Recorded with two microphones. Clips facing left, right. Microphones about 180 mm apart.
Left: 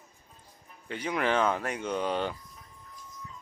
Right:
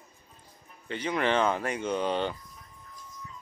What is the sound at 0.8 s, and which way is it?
Speech, 5° left (ahead or behind).